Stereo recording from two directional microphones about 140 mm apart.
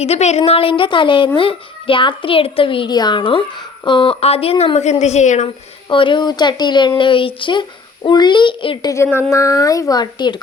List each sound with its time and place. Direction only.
0.0 s speech: 50° left (ahead or behind)
5.9 s speech: 35° left (ahead or behind)
9.3 s speech: 25° left (ahead or behind)